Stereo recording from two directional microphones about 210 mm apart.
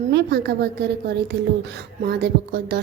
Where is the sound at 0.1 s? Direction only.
50° right (ahead or behind).